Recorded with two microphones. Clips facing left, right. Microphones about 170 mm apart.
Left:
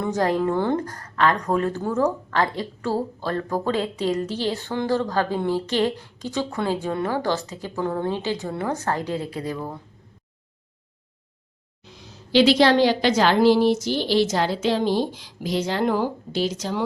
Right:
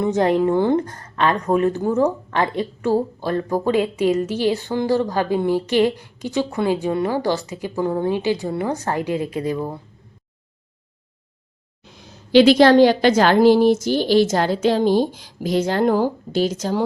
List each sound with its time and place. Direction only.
0.0 s a woman's voice: 20° right (ahead or behind)
11.9 s a woman's voice: 55° right (ahead or behind)